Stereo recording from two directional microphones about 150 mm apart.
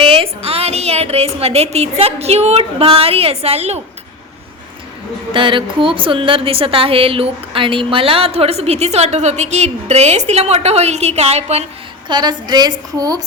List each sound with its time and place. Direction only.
0.0 s a woman's voice: 35° right (ahead or behind)
5.3 s a woman's voice: 35° right (ahead or behind)
12.0 s a woman's voice: 30° right (ahead or behind)